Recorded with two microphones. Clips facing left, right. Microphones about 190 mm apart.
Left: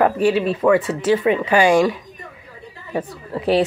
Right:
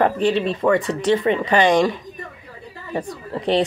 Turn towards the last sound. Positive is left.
turn(degrees=5)  # may be behind; listen again after turning